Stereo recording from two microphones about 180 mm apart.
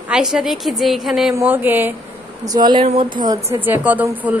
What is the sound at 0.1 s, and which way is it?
A woman's voice, 5° right (ahead or behind).